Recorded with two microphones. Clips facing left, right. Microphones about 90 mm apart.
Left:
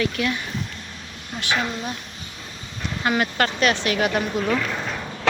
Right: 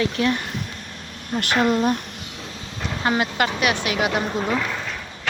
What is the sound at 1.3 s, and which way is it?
Speech, 50° right (ahead or behind).